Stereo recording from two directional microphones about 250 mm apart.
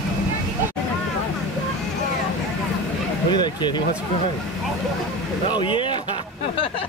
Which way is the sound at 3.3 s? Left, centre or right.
Centre.